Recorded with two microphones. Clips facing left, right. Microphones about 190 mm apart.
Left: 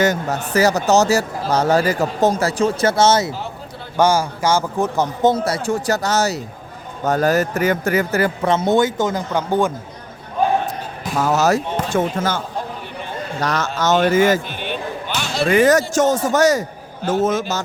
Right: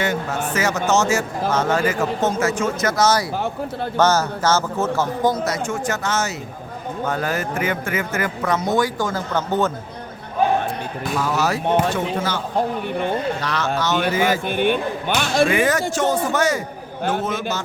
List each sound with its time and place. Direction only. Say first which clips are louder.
0.0 s speech: left 4 dB; 40° left (ahead or behind)
3.9 s a man's voice: left 2 dB; 10° left (ahead or behind)
11.2 s speech: left 6 dB; 45° left (ahead or behind)
13.4 s speech: left 2 dB; 45° left (ahead or behind)
14.4 s speech: right 7 dB; 55° right (ahead or behind)
15.4 s speech: left 5 dB; 40° left (ahead or behind)